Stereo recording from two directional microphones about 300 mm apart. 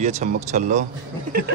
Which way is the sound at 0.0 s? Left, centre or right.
Right.